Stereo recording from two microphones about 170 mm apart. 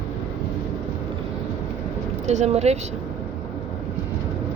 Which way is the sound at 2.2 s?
40° right (ahead or behind).